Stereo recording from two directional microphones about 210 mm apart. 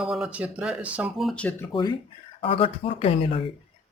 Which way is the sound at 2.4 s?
25° left (ahead or behind).